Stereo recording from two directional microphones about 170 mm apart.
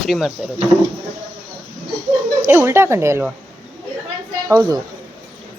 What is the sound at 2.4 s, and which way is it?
Speech, 15° right (ahead or behind).